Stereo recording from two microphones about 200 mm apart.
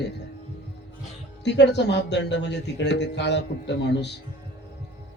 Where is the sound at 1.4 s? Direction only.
60° left (ahead or behind).